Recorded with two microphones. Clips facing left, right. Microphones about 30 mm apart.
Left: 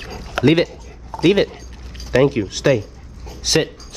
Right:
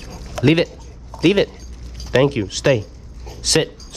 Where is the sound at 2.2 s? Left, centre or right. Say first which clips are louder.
Left 1 dB; right.